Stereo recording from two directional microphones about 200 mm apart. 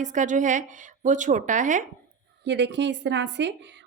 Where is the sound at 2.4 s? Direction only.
60° right (ahead or behind).